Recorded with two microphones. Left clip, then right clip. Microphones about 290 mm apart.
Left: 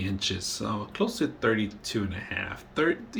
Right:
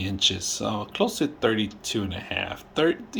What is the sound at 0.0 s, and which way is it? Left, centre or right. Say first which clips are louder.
Speech: right 7 dB; centre.